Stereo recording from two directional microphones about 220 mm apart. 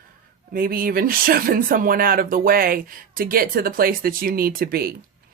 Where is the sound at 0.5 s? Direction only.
40° right (ahead or behind).